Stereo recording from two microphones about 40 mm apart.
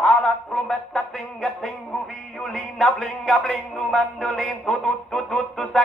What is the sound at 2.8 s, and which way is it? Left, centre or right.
Speech, centre.